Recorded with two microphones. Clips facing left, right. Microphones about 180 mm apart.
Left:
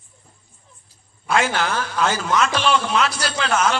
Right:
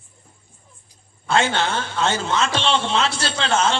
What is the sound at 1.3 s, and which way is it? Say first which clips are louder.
A man's voice: even; 25° right (ahead or behind).